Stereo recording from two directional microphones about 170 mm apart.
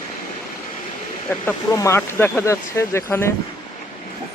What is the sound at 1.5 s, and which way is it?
Speech, 20° left (ahead or behind).